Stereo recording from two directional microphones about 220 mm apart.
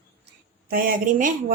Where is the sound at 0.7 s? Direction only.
40° right (ahead or behind).